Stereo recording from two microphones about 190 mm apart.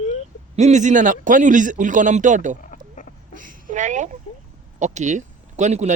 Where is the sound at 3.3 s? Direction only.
45° right (ahead or behind).